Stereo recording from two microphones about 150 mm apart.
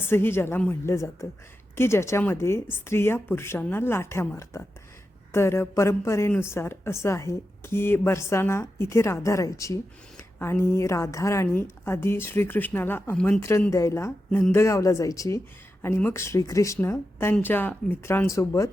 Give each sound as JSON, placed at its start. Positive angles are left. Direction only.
{"t": 0.0, "sound": "a woman's voice", "side_deg": 15}
{"t": 13.4, "sound": "speech", "side_deg": 20}
{"t": 14.3, "sound": "speech", "side_deg": 5}
{"t": 14.5, "sound": "a woman's voice", "side_deg": 20}